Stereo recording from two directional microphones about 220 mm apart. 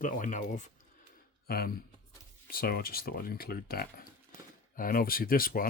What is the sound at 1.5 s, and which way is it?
Speech, 45° left (ahead or behind).